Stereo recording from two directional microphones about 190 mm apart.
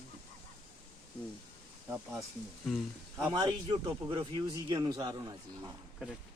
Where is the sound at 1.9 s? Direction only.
10° right (ahead or behind).